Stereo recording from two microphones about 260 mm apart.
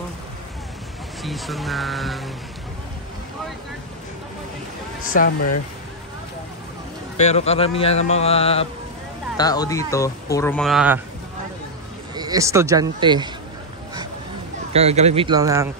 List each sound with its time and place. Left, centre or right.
1.2 s speech: centre
5.1 s speech: left
7.2 s mantra: left
9.4 s speech: centre
12.2 s speech: centre
14.7 s speech: right